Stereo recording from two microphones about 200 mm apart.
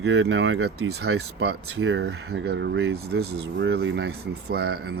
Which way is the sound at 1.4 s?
55° right (ahead or behind).